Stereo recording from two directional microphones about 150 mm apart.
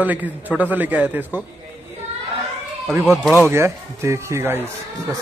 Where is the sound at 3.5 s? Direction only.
20° right (ahead or behind).